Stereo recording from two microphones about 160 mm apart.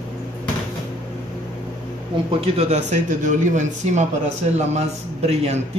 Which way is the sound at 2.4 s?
40° right (ahead or behind).